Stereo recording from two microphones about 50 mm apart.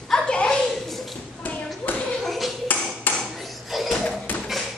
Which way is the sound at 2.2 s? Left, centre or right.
Centre.